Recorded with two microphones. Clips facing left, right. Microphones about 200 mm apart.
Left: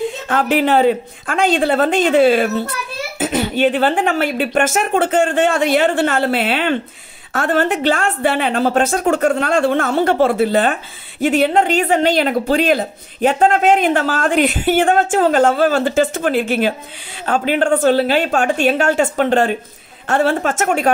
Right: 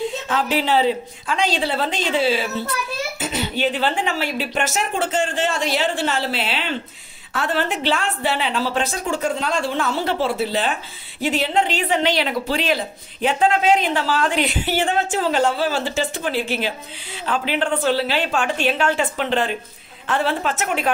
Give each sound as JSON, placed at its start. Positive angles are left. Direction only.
{"t": 0.3, "sound": "speech", "side_deg": 50}